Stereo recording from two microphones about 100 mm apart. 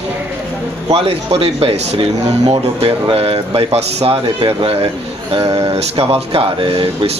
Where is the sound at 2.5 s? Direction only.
65° right (ahead or behind).